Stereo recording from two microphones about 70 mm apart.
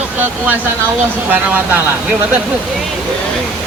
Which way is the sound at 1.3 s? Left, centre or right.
Right.